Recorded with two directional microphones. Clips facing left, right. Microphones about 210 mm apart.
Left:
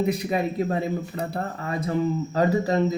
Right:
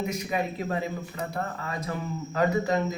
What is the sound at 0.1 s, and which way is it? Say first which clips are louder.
Speech: left 5 dB; 30° left (ahead or behind).